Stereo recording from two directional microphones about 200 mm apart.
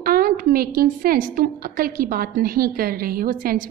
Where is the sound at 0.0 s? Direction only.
45° right (ahead or behind).